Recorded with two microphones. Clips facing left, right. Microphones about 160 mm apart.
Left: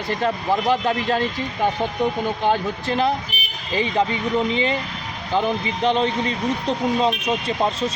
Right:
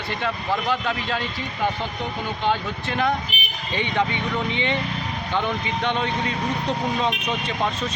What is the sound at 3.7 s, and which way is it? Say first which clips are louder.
Speech: left 3 dB; 35° left (ahead or behind).